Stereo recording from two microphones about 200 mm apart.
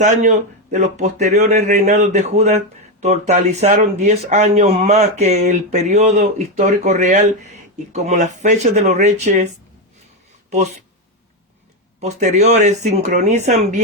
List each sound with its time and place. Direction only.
0.0 s speech: 35° right (ahead or behind)
11.9 s speech: 35° right (ahead or behind)